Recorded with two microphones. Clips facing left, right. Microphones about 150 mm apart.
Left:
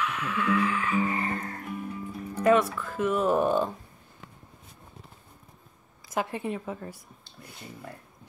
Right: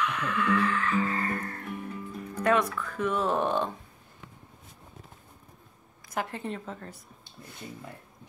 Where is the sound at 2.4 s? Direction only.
5° left (ahead or behind).